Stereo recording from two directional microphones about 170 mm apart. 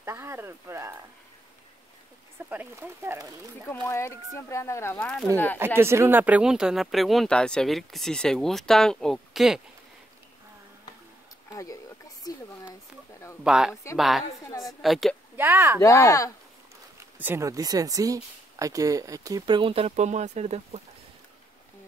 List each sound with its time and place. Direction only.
0.0 s speech: 15° right (ahead or behind)
2.5 s speech: 10° right (ahead or behind)
3.6 s speech: 15° left (ahead or behind)
5.6 s speech: 15° right (ahead or behind)
11.5 s a sound: 20° left (ahead or behind)
13.4 s speech: 5° right (ahead or behind)
15.3 s speech: 10° right (ahead or behind)
15.8 s speech: 20° left (ahead or behind)
17.2 s speech: 15° right (ahead or behind); by 20.8 s 40° right (ahead or behind)